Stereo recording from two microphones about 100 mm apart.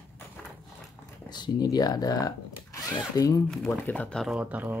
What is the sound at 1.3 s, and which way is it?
Speech, 45° left (ahead or behind).